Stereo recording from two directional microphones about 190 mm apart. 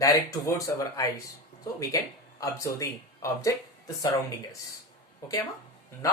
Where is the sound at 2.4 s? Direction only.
15° left (ahead or behind).